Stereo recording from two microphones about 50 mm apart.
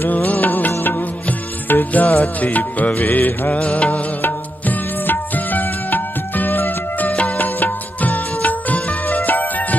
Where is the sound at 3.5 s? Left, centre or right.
Left.